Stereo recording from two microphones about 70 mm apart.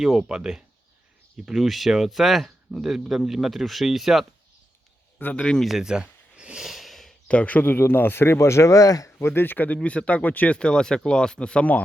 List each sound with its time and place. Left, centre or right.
0.0 s speech: centre
5.2 s speech: centre
5.6 s a sound: centre
7.3 s speech: left
9.0 s speech: left; by 11.8 s centre